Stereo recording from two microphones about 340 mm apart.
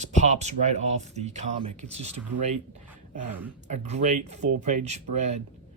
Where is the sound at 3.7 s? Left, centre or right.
Centre.